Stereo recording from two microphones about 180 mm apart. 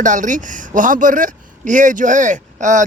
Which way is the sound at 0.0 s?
45° right (ahead or behind).